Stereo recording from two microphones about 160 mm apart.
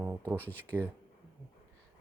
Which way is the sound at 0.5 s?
10° right (ahead or behind).